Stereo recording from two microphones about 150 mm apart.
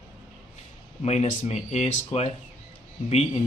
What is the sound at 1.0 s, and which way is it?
Speech, 45° left (ahead or behind).